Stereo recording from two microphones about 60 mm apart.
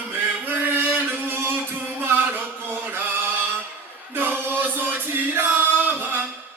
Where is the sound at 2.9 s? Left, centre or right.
Right.